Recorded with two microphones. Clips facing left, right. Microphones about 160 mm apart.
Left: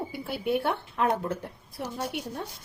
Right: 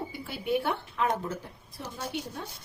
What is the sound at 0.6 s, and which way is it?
A woman's voice, 55° left (ahead or behind).